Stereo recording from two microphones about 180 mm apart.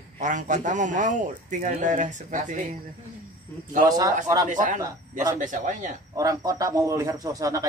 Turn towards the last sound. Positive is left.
turn(degrees=-20)  # may be behind; listen again after turning